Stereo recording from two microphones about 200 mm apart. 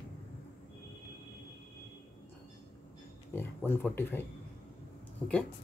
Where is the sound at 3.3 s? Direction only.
10° left (ahead or behind).